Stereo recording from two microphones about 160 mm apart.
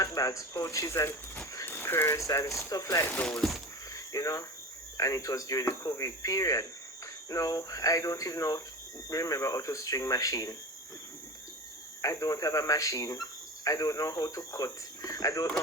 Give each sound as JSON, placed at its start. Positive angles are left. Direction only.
{"t": 0.0, "sound": "speech", "side_deg": 20}
{"t": 3.2, "sound": "speech", "side_deg": 5}
{"t": 3.9, "sound": "cricket", "side_deg": 20}
{"t": 4.9, "sound": "speech", "side_deg": 20}
{"t": 12.0, "sound": "speech", "side_deg": 20}